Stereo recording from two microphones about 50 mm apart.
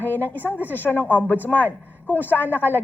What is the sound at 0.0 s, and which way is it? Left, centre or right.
A woman's voice, left.